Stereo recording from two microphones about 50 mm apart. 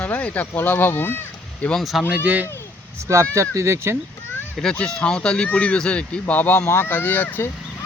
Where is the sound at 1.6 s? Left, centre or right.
Left.